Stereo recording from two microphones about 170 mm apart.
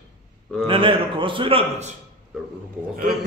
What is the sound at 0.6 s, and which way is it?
A man's voice, 30° right (ahead or behind).